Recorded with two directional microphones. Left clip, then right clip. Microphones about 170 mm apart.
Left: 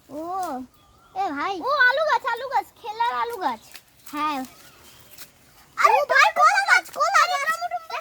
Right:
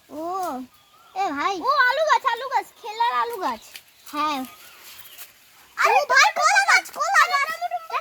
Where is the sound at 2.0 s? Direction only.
10° left (ahead or behind).